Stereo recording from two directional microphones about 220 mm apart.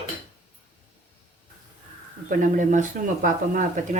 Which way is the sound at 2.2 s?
35° right (ahead or behind).